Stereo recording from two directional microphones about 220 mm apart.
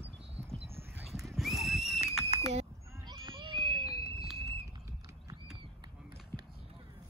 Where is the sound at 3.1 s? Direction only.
20° right (ahead or behind).